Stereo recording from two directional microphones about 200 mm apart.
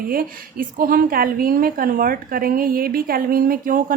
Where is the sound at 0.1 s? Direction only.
45° right (ahead or behind).